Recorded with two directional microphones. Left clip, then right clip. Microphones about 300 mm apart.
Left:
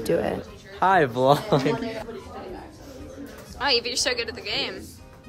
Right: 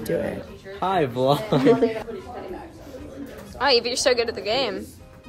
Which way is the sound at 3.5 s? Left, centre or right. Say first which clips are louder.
Right 3 dB; centre.